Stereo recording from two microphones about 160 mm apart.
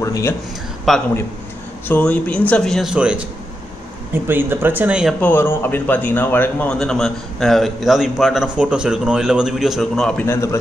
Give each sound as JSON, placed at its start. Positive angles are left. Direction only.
{"t": 0.0, "sound": "speech", "side_deg": 20}
{"t": 0.9, "sound": "a man's voice", "side_deg": 0}
{"t": 5.2, "sound": "a man's voice", "side_deg": 15}
{"t": 10.2, "sound": "a man's voice", "side_deg": 15}